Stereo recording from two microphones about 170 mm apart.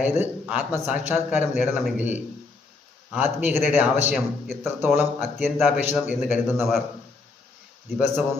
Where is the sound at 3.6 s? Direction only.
10° right (ahead or behind).